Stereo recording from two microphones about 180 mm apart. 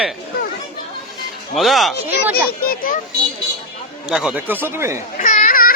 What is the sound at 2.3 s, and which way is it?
Speech, 55° left (ahead or behind).